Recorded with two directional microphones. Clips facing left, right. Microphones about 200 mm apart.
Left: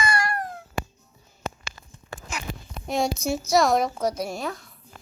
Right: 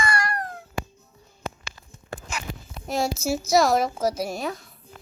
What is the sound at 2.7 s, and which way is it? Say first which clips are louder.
A woman's voice: left 1 dB; centre (ahead or behind).